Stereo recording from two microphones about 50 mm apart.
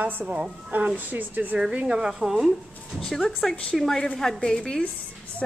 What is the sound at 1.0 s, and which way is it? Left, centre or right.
Speech, right.